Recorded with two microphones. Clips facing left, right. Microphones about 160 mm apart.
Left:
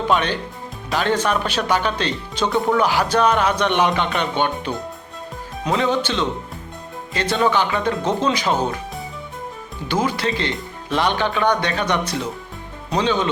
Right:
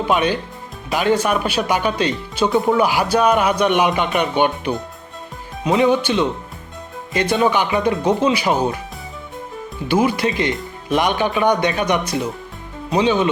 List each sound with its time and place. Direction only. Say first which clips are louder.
0.1 s speech: right 3 dB; 10° right (ahead or behind)
9.9 s speech: right 4 dB; 10° right (ahead or behind)